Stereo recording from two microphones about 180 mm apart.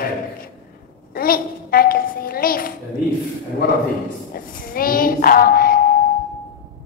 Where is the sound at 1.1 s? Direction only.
55° left (ahead or behind).